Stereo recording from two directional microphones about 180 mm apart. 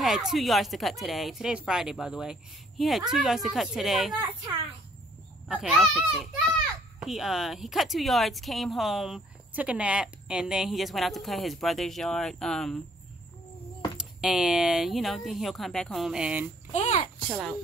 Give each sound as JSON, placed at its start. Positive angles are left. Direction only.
{"t": 0.0, "sound": "speech", "side_deg": 0}
{"t": 4.1, "sound": "speech", "side_deg": -30}
{"t": 5.5, "sound": "speech", "side_deg": 0}
{"t": 14.2, "sound": "speech", "side_deg": -5}
{"t": 16.7, "sound": "a child's voice", "side_deg": 35}
{"t": 17.3, "sound": "speech", "side_deg": 0}